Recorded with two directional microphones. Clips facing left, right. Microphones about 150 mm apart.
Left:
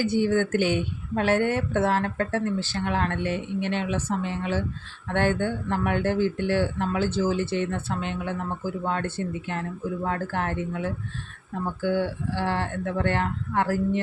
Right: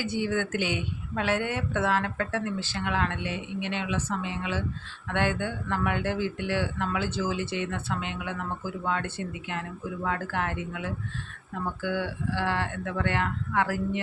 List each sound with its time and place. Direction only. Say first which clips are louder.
0.0 s speech: left 6 dB; 40° left (ahead or behind)